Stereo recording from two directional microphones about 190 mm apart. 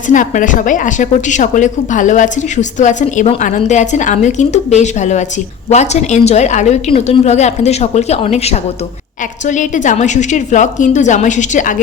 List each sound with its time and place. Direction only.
0.1 s a woman's voice: 40° left (ahead or behind)